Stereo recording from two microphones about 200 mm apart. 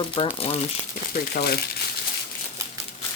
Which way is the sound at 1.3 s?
50° left (ahead or behind).